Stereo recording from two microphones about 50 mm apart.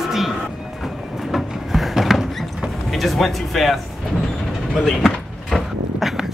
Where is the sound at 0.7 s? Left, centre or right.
Centre.